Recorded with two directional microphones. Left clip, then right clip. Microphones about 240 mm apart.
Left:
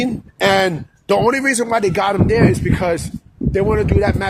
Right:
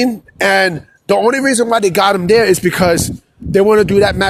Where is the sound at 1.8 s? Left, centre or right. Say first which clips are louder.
Right 5 dB; right.